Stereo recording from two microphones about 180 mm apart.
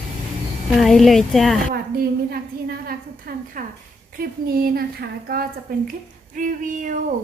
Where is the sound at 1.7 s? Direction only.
55° right (ahead or behind).